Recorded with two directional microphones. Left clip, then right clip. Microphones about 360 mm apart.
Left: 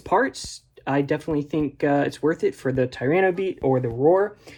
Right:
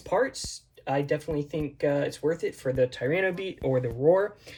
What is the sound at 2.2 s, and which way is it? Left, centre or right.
Speech, left.